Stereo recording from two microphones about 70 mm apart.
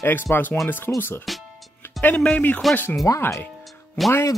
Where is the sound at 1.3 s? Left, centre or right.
Centre.